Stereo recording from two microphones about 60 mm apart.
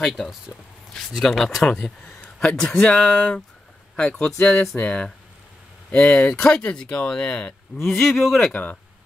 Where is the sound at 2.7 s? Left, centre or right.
Left.